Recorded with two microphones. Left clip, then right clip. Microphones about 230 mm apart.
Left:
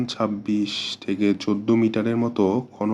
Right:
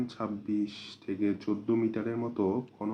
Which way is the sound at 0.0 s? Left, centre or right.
Left.